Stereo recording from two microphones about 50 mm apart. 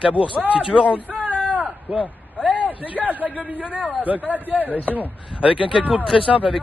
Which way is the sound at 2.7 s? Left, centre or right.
Left.